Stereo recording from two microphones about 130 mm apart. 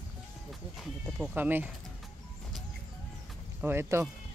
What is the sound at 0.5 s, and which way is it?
Sheep, centre (ahead or behind).